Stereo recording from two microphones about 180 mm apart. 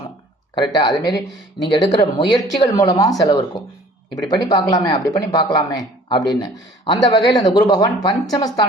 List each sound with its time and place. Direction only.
0.5 s speech: 25° left (ahead or behind)